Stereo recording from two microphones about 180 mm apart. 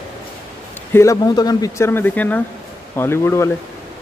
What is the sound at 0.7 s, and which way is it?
Speech, 15° left (ahead or behind).